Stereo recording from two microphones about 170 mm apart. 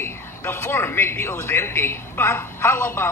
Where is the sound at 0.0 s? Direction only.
15° left (ahead or behind).